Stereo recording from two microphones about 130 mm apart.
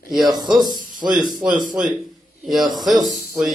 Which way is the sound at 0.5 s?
30° right (ahead or behind).